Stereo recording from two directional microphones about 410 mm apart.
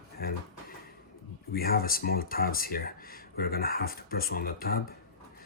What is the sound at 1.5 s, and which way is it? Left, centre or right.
Speech, left.